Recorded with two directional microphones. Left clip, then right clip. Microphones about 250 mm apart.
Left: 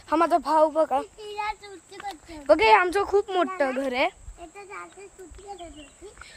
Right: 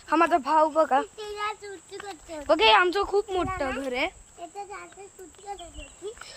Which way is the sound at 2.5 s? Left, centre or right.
Left.